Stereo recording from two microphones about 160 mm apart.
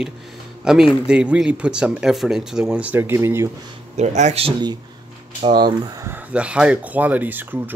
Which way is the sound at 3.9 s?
45° right (ahead or behind).